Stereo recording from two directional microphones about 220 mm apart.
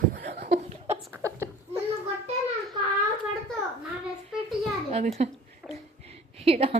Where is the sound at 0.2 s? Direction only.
50° right (ahead or behind).